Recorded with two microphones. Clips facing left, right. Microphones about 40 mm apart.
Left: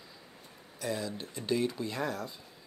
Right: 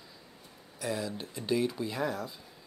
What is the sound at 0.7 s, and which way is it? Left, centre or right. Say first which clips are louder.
Speech: right 1 dB; centre.